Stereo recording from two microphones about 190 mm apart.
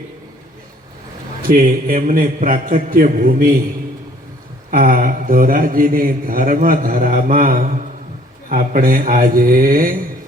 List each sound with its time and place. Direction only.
1.4 s a man's voice: 50° right (ahead or behind)
4.7 s a man's voice: 50° right (ahead or behind)